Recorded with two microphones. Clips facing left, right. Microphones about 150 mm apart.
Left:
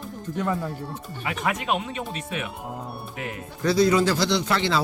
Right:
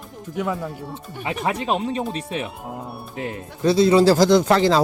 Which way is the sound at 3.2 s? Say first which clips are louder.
Right 6 dB; 30° right (ahead or behind).